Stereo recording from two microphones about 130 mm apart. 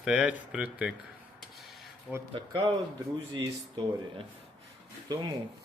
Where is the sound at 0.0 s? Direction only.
10° right (ahead or behind).